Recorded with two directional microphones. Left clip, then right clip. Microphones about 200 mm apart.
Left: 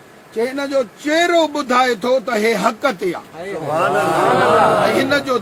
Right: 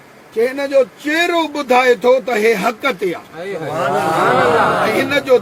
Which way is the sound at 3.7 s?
Centre (ahead or behind).